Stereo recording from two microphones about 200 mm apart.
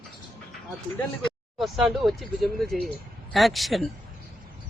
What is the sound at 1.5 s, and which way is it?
Speech, centre (ahead or behind).